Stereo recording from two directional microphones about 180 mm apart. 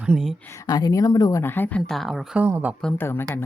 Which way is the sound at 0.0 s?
5° right (ahead or behind).